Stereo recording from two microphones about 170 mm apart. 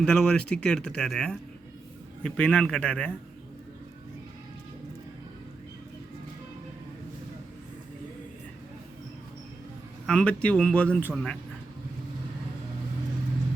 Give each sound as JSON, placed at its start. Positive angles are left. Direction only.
{"t": 0.0, "sound": "a man's voice", "side_deg": 5}
{"t": 10.1, "sound": "speech", "side_deg": 5}